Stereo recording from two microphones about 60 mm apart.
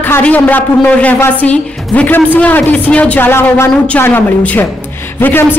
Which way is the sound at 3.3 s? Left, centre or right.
Left.